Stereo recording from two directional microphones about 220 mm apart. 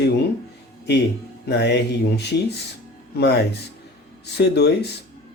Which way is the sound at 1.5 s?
50° left (ahead or behind).